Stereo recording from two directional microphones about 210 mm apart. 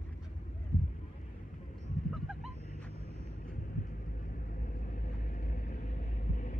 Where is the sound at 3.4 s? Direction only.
40° left (ahead or behind).